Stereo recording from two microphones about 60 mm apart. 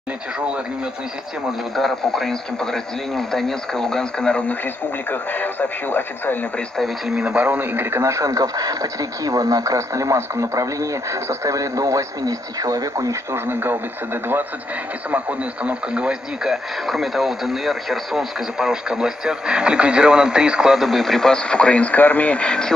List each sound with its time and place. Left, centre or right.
1.8 s speech: centre
5.1 s speech: left
7.1 s speech: centre
8.0 s speech: right
13.3 s speech: right
15.0 s speech: right
16.8 s speech: centre